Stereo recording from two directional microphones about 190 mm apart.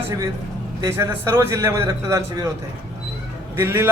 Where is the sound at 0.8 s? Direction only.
15° right (ahead or behind).